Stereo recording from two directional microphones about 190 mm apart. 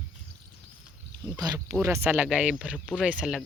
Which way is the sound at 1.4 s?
20° right (ahead or behind).